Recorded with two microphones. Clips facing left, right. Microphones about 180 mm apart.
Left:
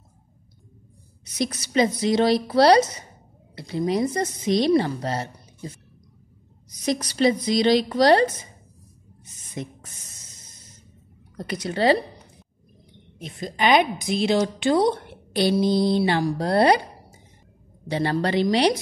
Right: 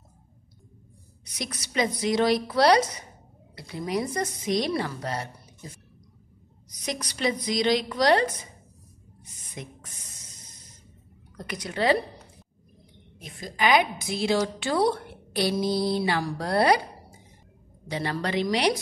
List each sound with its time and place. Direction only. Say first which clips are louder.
1.4 s a woman's voice: left 6 dB; 30° left (ahead or behind)
6.8 s a woman's voice: left 8 dB; 30° left (ahead or behind)
9.6 s a woman's voice: left 7 dB; 35° left (ahead or behind)
11.6 s a woman's voice: left 4 dB; 30° left (ahead or behind)
13.2 s a woman's voice: left 3 dB; 25° left (ahead or behind)
15.0 s a sound: left 4 dB; 25° left (ahead or behind)
15.6 s a woman's voice: left 5 dB; 25° left (ahead or behind)
17.8 s a woman's voice: left 6 dB; 30° left (ahead or behind)